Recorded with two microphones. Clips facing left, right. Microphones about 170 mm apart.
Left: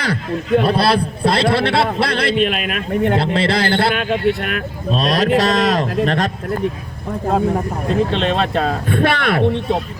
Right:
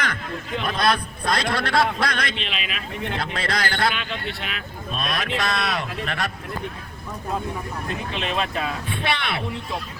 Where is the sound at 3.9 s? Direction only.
50° left (ahead or behind).